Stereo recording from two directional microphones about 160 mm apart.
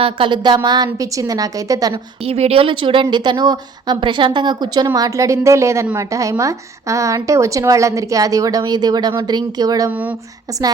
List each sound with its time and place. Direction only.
0.0 s a woman's voice: 30° right (ahead or behind)
1.9 s a woman's voice: 40° right (ahead or behind); by 9.9 s 25° right (ahead or behind)
9.9 s speech: 10° right (ahead or behind)